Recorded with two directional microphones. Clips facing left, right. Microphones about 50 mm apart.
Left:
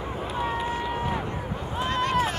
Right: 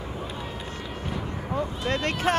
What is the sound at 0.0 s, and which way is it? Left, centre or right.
Run, left.